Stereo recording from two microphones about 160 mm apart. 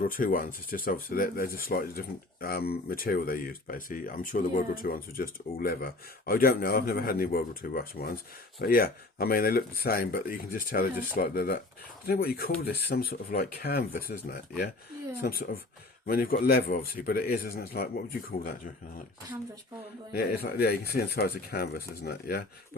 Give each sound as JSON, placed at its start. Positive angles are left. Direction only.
{"t": 0.1, "sound": "speech", "side_deg": 60}
{"t": 20.1, "sound": "speech", "side_deg": 80}